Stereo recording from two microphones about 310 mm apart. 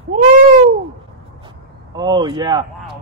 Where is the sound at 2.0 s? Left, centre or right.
Centre.